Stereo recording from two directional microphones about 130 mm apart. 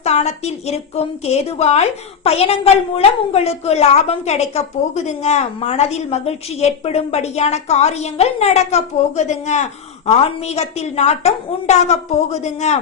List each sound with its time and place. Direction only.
0.0 s a woman's voice: 55° left (ahead or behind)